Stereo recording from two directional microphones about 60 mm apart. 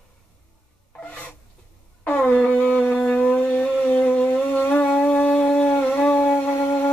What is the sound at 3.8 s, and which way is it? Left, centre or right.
Shofar, left.